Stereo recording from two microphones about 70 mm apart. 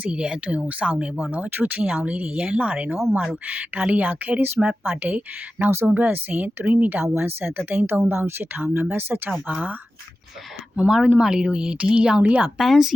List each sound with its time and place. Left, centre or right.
0.0 s speech: centre
3.0 s speech: centre
3.2 s speech: right
10.8 s speech: centre
12.5 s speech: centre